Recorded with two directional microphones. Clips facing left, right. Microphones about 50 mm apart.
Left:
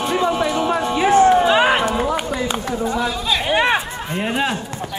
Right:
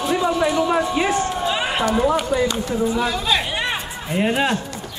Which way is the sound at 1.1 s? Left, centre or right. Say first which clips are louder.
Left 9 dB; left.